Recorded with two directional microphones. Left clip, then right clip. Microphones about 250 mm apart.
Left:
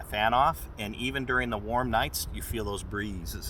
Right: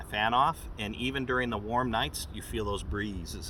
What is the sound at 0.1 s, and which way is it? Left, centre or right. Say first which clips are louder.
Speech: left 2 dB; centre.